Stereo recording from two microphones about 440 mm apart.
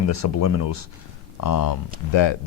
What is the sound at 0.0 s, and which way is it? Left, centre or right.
Speech, left.